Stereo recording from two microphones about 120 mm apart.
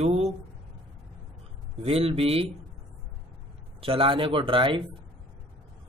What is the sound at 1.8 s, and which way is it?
Speech, 55° right (ahead or behind).